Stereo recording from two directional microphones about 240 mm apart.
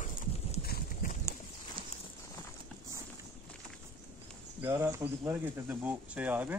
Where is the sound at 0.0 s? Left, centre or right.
Left.